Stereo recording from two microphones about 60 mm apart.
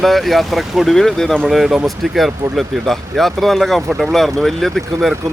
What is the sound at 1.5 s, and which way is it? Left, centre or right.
Speech, centre.